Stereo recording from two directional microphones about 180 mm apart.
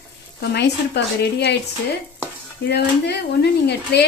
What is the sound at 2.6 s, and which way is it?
Speech, 65° left (ahead or behind).